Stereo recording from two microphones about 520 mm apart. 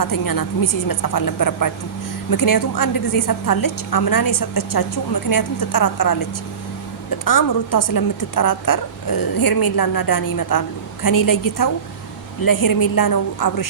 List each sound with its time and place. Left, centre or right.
0.0 s a woman's voice: left
7.3 s a woman's voice: left